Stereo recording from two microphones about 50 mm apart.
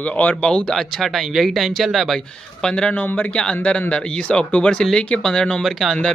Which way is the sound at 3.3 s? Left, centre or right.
Centre.